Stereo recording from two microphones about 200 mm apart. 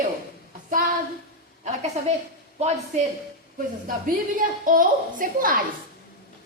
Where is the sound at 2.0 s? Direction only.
35° right (ahead or behind).